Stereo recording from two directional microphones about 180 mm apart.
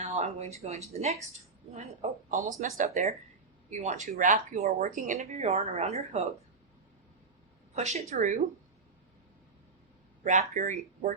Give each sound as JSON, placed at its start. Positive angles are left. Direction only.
{"t": 0.1, "sound": "speech", "side_deg": -40}
{"t": 7.8, "sound": "speech", "side_deg": -35}
{"t": 10.2, "sound": "speech", "side_deg": -45}